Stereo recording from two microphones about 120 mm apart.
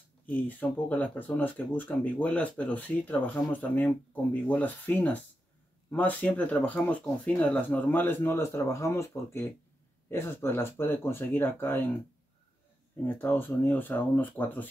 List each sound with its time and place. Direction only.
0.3 s speech: 15° left (ahead or behind)
13.2 s speech: 15° left (ahead or behind)